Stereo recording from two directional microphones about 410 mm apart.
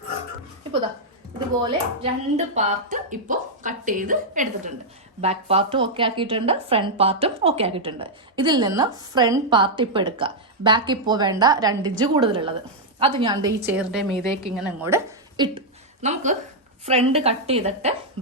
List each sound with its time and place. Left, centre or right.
1.6 s a woman's voice: centre